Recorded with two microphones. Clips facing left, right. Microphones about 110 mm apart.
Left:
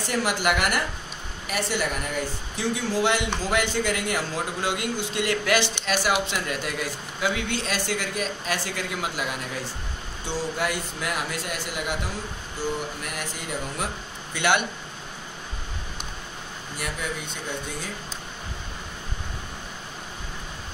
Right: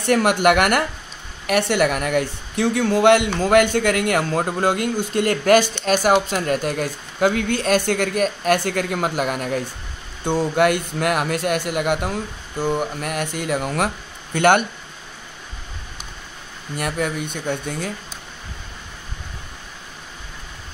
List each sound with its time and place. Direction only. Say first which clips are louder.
0.0 s a man's voice: right 9 dB; 60° right (ahead or behind)
14.3 s a man's voice: right 8 dB; 50° right (ahead or behind)
16.7 s a man's voice: right 8 dB; 55° right (ahead or behind)